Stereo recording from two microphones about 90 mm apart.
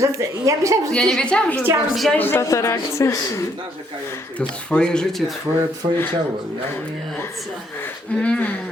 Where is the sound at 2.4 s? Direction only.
35° left (ahead or behind).